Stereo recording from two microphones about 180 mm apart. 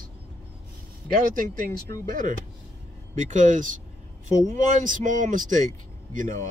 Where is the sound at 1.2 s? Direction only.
50° right (ahead or behind).